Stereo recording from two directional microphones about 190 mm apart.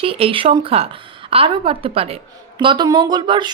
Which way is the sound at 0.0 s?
30° right (ahead or behind).